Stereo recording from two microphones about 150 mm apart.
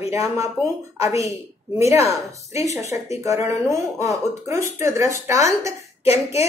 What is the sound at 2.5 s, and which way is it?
Speech, 20° right (ahead or behind).